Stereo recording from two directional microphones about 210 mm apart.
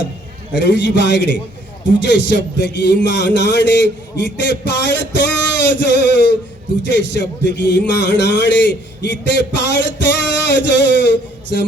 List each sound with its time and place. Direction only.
0.5 s speech: 55° left (ahead or behind)